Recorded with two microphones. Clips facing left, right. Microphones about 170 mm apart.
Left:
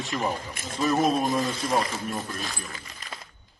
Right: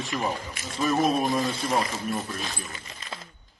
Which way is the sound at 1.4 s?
30° right (ahead or behind).